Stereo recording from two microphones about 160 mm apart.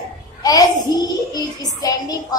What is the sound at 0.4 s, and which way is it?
A woman's voice, 25° left (ahead or behind).